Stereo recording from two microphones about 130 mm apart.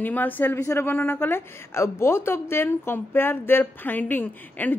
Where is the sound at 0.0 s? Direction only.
15° left (ahead or behind).